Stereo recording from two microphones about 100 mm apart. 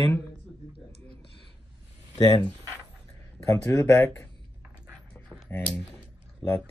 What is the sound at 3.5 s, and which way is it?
Speech, 30° left (ahead or behind).